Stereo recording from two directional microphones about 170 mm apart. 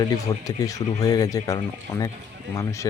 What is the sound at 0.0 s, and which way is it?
Speech, 20° left (ahead or behind).